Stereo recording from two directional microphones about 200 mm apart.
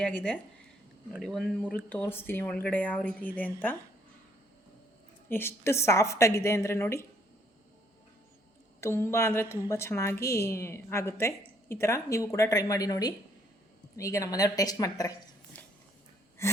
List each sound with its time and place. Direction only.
1.1 s a woman's voice: centre (ahead or behind)
5.3 s a woman's voice: 10° left (ahead or behind)
8.8 s a woman's voice: 10° left (ahead or behind)
16.4 s gasp: 15° left (ahead or behind)